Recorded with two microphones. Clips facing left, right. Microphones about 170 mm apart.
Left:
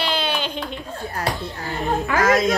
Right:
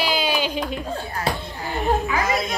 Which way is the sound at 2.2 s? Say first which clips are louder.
Left 6 dB; 90° left.